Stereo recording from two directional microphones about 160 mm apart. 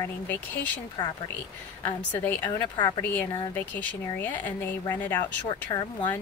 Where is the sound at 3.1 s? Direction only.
15° left (ahead or behind).